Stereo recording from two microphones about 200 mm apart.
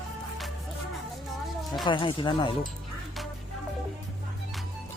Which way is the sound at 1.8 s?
25° left (ahead or behind).